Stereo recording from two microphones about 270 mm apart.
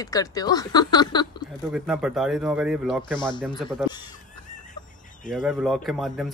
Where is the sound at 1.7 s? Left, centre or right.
Centre.